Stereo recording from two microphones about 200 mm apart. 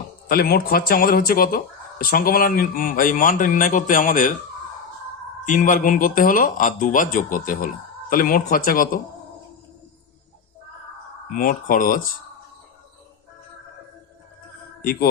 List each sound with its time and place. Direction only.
0.3 s speech: 50° left (ahead or behind)
5.5 s speech: 40° left (ahead or behind)
11.3 s speech: 45° left (ahead or behind)
14.8 s mantra: 50° left (ahead or behind)